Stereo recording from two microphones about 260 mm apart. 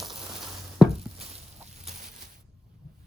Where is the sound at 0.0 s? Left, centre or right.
Centre.